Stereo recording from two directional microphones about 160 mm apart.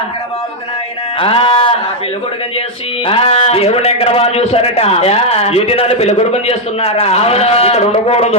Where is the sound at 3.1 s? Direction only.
35° left (ahead or behind).